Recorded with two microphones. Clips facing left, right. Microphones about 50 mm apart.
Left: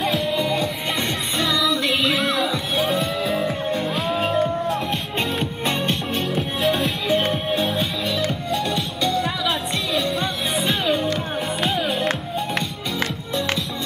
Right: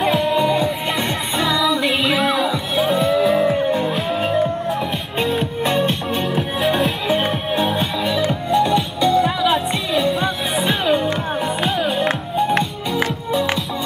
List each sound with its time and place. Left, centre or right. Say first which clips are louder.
0.3 s music: right 5 dB; centre